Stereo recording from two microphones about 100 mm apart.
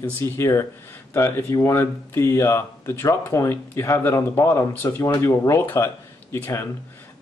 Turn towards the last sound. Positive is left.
turn(degrees=25)  # may be behind; listen again after turning